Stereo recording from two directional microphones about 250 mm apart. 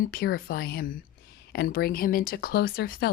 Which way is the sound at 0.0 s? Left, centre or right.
Left.